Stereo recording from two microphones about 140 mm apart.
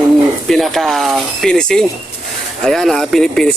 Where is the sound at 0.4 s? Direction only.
Centre (ahead or behind).